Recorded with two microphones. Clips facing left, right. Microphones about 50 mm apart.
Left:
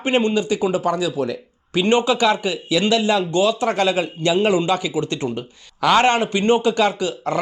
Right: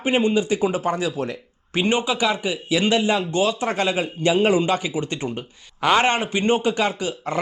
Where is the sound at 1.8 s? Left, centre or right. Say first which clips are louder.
Left 5 dB; centre.